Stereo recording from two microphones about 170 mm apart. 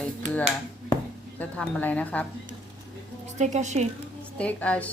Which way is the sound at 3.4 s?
45° right (ahead or behind).